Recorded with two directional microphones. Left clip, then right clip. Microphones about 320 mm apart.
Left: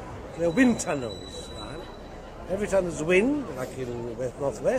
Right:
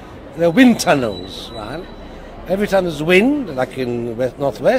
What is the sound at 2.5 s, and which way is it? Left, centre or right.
A man's voice, right.